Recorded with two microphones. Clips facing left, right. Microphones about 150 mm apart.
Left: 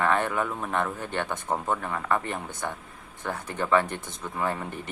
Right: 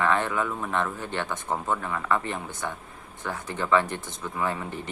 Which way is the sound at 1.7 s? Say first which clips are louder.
Right 1 dB; 35° left (ahead or behind).